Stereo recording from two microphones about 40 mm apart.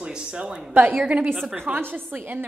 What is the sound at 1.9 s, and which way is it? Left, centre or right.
Speech, right.